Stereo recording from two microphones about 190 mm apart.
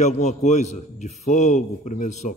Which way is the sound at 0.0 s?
40° left (ahead or behind).